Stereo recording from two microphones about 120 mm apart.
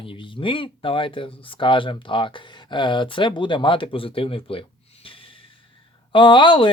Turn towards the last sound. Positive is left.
turn(degrees=40)  # may be behind; listen again after turning